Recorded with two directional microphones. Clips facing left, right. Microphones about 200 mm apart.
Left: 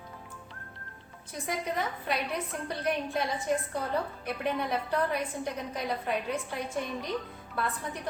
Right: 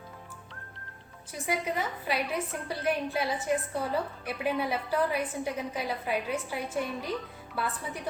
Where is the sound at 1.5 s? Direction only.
5° right (ahead or behind).